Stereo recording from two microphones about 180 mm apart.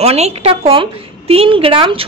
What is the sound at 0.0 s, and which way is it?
A woman's voice, 35° right (ahead or behind).